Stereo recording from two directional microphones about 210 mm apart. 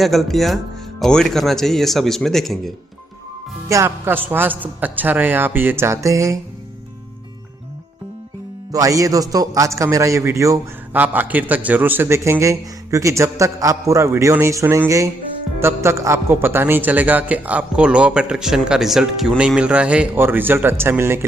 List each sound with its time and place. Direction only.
0.0 s speech: centre (ahead or behind)
3.7 s a man's voice: 15° right (ahead or behind)
8.7 s a man's voice: 15° right (ahead or behind)